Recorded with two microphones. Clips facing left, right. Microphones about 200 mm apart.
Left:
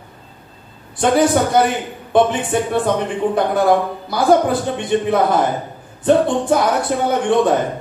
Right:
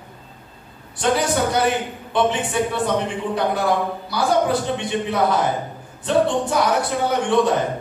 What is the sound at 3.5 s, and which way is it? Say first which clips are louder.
Speech: left 6 dB; 50° left (ahead or behind).